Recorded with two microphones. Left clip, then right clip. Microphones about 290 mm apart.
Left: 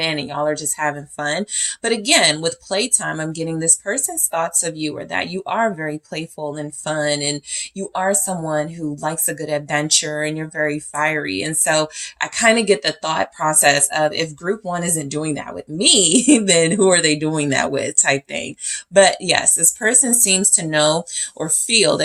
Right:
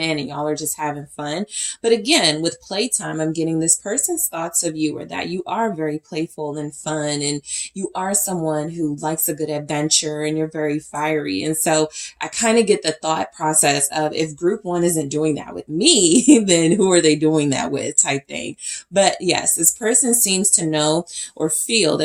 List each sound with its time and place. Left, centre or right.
0.1 s speech: left